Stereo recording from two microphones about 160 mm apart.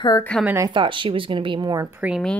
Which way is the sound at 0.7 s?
30° right (ahead or behind).